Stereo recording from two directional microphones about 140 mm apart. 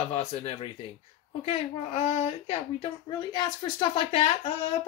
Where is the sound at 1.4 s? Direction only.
50° left (ahead or behind).